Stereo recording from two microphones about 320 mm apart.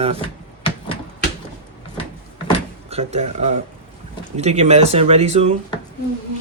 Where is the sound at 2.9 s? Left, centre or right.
Centre.